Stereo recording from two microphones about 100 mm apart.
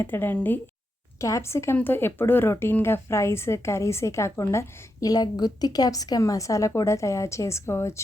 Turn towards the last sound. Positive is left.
turn(degrees=30)  # may be behind; listen again after turning